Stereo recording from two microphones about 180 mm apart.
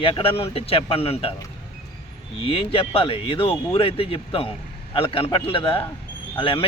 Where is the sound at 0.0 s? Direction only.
30° left (ahead or behind).